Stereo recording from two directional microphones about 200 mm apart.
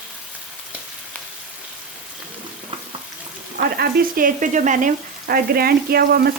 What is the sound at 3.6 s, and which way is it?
Frying, 50° right (ahead or behind).